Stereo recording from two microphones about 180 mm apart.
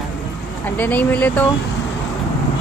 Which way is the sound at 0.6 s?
10° left (ahead or behind).